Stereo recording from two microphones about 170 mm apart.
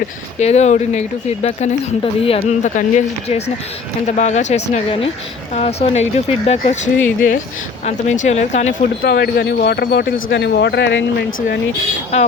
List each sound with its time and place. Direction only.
0.3 s speech: 40° left (ahead or behind)
6.7 s speech: 50° left (ahead or behind)
9.0 s speech: 75° left (ahead or behind)